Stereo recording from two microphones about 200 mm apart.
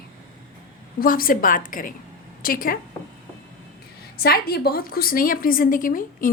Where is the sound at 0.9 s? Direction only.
45° left (ahead or behind).